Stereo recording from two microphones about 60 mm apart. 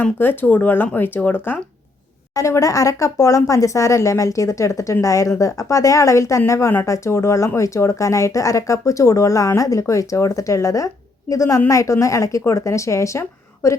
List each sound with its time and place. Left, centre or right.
0.0 s speech: left
2.3 s speech: left